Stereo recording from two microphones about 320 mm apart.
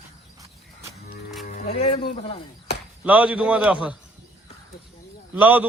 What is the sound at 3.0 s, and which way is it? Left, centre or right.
Cattle, centre.